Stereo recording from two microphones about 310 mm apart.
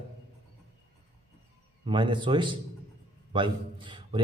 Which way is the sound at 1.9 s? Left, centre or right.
Centre.